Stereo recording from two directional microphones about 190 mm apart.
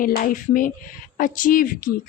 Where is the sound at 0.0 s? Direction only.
45° left (ahead or behind).